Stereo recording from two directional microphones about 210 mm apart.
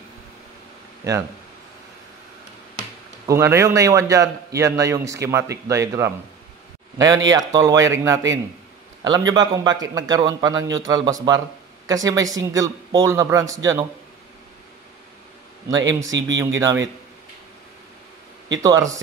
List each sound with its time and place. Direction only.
3.3 s speech: 10° right (ahead or behind)
7.2 s a man's voice: 15° right (ahead or behind)
15.7 s speech: 15° right (ahead or behind)
16.1 s speech: 60° right (ahead or behind)
16.3 s speech: 15° right (ahead or behind)
18.6 s speech: 15° right (ahead or behind)